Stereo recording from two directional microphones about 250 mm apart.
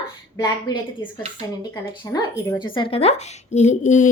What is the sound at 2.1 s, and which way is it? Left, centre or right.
A woman's voice, centre.